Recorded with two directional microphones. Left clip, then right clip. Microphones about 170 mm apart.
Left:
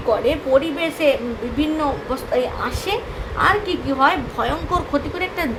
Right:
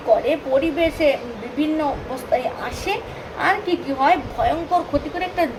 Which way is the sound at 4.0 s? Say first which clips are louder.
Even; 45° left (ahead or behind).